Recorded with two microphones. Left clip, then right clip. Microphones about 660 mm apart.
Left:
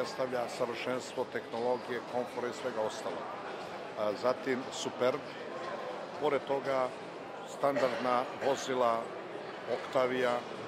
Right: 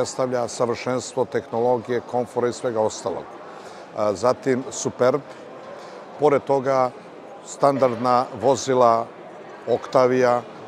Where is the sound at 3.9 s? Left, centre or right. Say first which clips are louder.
Right 12 dB; right.